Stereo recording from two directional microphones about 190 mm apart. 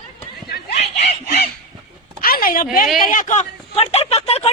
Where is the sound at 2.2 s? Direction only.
50° left (ahead or behind).